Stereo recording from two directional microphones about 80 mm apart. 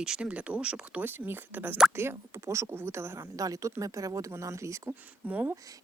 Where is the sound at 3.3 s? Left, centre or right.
Right.